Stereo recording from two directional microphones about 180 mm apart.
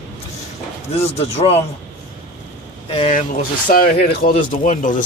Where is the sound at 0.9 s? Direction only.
35° left (ahead or behind).